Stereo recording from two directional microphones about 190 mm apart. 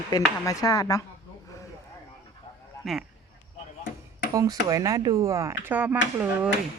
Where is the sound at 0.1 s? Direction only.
20° left (ahead or behind).